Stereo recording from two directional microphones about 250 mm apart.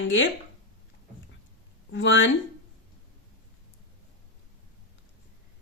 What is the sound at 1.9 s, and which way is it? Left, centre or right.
Speech, left.